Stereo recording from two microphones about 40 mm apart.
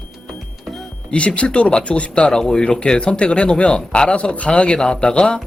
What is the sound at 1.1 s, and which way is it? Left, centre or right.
Speech, left.